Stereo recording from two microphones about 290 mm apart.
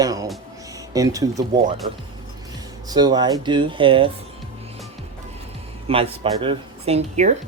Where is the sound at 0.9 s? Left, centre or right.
Centre.